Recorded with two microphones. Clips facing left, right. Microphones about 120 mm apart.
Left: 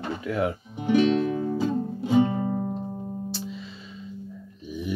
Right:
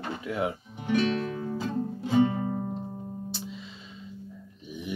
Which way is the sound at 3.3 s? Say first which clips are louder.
Left 4 dB; 20° right (ahead or behind).